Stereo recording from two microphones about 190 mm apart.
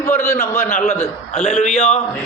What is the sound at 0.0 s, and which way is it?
A man's voice, 15° left (ahead or behind).